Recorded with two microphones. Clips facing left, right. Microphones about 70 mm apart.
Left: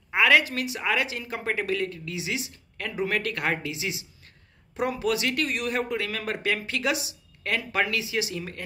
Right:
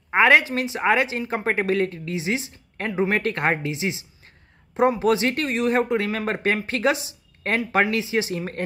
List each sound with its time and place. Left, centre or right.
0.1 s a woman's voice: right